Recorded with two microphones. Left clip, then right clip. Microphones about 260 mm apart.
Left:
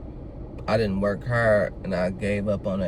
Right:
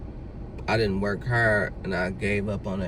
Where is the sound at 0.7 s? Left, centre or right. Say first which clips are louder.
Left 2 dB; centre.